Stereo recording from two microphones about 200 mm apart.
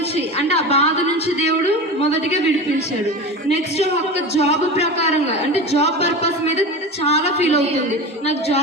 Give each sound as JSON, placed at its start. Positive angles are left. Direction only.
{"t": 0.3, "sound": "a man's voice", "side_deg": 30}
{"t": 4.4, "sound": "a man's voice", "side_deg": 30}